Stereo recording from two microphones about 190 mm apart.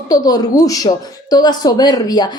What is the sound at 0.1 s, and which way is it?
A woman's voice, 20° left (ahead or behind).